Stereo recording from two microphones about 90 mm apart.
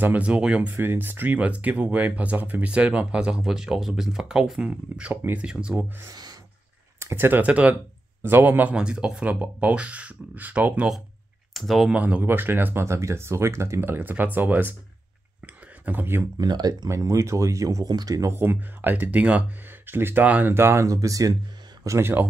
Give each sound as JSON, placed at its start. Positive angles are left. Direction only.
{"t": 0.0, "sound": "speech", "side_deg": -15}
{"t": 5.4, "sound": "speech", "side_deg": -10}
{"t": 7.0, "sound": "speech", "side_deg": -30}
{"t": 8.7, "sound": "speech", "side_deg": -10}
{"t": 11.5, "sound": "speech", "side_deg": 0}
{"t": 11.9, "sound": "speech", "side_deg": -15}
{"t": 15.4, "sound": "a sound", "side_deg": -20}
{"t": 16.3, "sound": "speech", "side_deg": -50}
{"t": 16.9, "sound": "speech", "side_deg": -35}
{"t": 18.3, "sound": "speech", "side_deg": -25}
{"t": 21.8, "sound": "speech", "side_deg": -30}